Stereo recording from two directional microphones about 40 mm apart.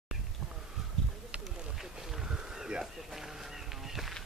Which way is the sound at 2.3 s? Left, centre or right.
Centre.